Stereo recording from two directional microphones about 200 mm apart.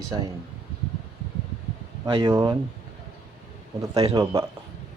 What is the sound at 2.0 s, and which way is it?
Speech, 25° right (ahead or behind).